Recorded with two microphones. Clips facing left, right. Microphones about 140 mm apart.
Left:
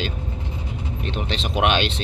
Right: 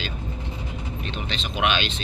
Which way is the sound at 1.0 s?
60° left (ahead or behind).